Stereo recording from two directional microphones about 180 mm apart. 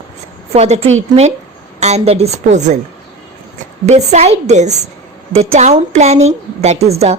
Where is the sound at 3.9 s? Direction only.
35° right (ahead or behind).